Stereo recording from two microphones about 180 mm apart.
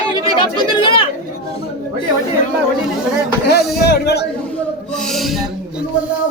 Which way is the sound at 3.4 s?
60° left (ahead or behind).